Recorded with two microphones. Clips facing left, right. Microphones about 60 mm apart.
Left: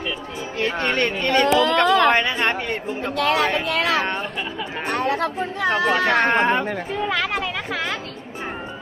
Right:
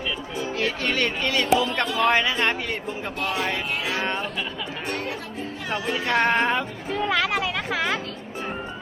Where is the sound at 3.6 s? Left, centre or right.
Left.